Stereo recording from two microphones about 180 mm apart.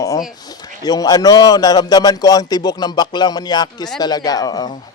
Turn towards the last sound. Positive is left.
turn(degrees=20)  # may be behind; listen again after turning